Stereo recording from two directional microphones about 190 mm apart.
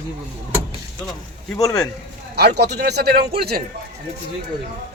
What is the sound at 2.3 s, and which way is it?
A man's voice, 60° right (ahead or behind).